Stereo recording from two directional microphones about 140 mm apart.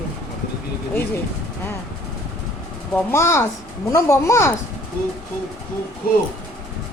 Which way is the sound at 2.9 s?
20° left (ahead or behind).